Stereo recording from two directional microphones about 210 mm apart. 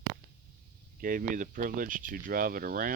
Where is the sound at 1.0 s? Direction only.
40° right (ahead or behind).